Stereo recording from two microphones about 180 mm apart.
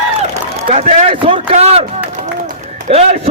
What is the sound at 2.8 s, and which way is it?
Speech, 35° right (ahead or behind).